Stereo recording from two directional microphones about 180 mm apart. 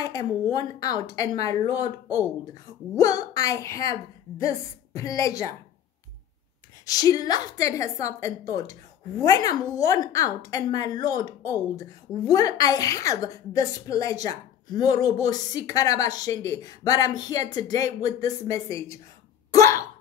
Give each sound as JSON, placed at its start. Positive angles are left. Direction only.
{"t": 0.0, "sound": "a woman's voice", "side_deg": 20}
{"t": 3.0, "sound": "a woman's voice", "side_deg": 20}
{"t": 6.9, "sound": "a woman's voice", "side_deg": 20}
{"t": 19.5, "sound": "hiccup", "side_deg": 15}